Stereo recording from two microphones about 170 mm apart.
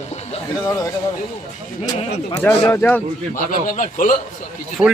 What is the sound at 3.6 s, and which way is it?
Speech, 50° left (ahead or behind).